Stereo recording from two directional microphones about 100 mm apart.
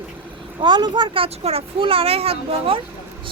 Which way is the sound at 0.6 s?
50° right (ahead or behind).